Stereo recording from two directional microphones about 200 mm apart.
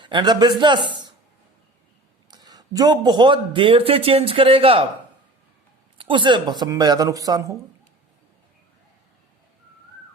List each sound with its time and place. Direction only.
0.0 s a man's voice: 20° right (ahead or behind)
2.3 s a man's voice: 20° right (ahead or behind)
6.0 s a man's voice: 25° right (ahead or behind)